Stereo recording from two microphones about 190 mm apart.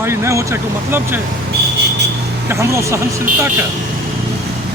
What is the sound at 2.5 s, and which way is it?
Speech, 15° right (ahead or behind).